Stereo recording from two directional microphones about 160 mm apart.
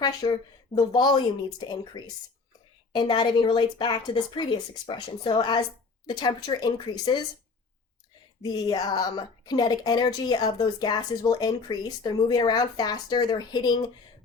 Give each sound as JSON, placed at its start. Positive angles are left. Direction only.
{"t": 0.0, "sound": "speech", "side_deg": 25}
{"t": 8.4, "sound": "speech", "side_deg": 25}